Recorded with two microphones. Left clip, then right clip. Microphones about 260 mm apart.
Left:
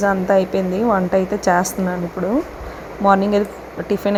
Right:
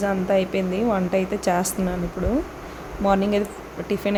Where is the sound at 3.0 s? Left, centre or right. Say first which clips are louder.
Left 6 dB; centre.